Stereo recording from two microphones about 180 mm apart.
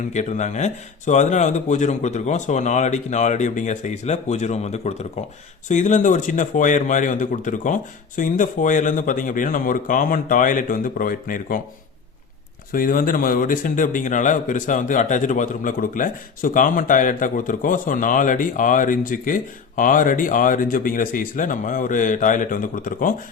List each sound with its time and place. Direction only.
0.1 s a man's voice: 40° left (ahead or behind)
12.7 s a man's voice: 50° left (ahead or behind)